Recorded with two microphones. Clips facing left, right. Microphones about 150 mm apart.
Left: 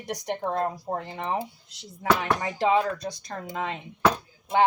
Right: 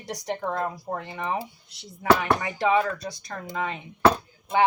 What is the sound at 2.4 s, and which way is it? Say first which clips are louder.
Speech: even; 35° left (ahead or behind).